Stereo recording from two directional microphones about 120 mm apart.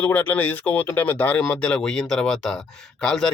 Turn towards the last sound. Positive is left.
turn(degrees=5)  # may be behind; listen again after turning